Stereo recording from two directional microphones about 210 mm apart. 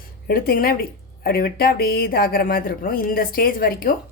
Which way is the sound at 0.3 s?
45° left (ahead or behind).